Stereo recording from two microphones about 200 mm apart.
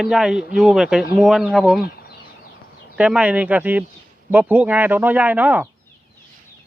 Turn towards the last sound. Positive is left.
turn(degrees=-10)  # may be behind; listen again after turning